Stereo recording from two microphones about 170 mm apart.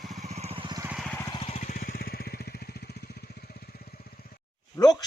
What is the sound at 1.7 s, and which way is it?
Vehicle, 55° left (ahead or behind).